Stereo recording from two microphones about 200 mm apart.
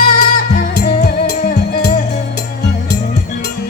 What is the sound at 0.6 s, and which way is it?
Music, 45° left (ahead or behind).